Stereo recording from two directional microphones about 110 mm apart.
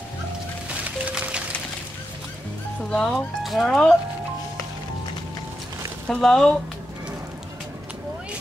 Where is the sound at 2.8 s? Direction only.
5° left (ahead or behind).